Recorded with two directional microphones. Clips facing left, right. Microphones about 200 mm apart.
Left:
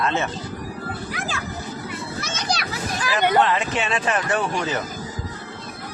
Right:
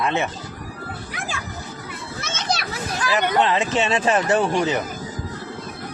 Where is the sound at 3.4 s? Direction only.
25° right (ahead or behind).